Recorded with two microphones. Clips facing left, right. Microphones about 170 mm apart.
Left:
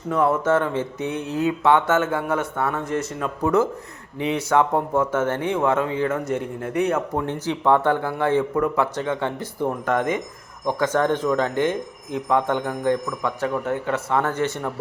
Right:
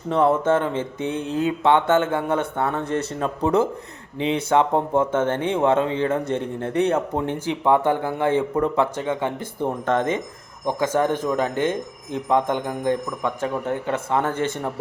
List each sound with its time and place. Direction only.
0.1 s speech: 25° right (ahead or behind)
7.3 s speech: 15° right (ahead or behind)
10.7 s speech: 15° right (ahead or behind)